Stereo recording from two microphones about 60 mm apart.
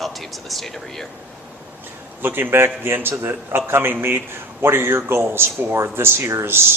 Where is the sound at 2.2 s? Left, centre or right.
Right.